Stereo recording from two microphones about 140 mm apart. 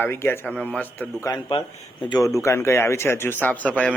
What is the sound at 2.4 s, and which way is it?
Speech, 20° left (ahead or behind).